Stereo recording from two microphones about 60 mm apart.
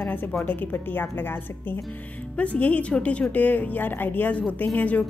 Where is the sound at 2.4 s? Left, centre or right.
Left.